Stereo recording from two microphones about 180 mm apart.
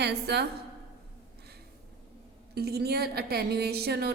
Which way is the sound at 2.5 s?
60° right (ahead or behind).